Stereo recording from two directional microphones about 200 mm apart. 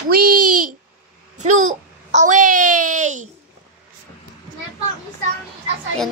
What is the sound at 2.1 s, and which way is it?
A child's voice, 40° right (ahead or behind).